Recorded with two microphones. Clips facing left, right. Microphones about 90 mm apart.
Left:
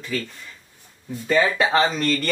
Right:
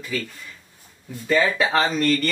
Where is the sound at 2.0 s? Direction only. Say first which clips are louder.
Right 2 dB; 25° left (ahead or behind).